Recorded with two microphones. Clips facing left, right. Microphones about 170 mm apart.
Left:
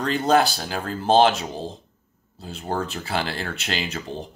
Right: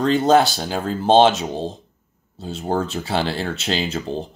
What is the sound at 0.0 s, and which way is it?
Speech, 25° right (ahead or behind).